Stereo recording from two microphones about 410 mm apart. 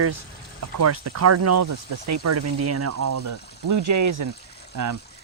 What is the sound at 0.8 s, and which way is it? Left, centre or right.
Speech, right.